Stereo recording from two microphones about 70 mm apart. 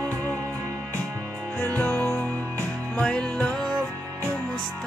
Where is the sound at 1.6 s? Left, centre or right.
Left.